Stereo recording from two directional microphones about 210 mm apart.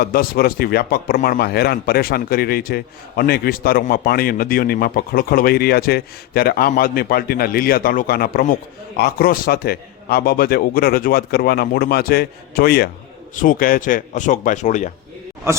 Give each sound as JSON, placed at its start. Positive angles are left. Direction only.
{"t": 0.0, "sound": "a man's voice", "side_deg": 45}
{"t": 15.5, "sound": "speech", "side_deg": -15}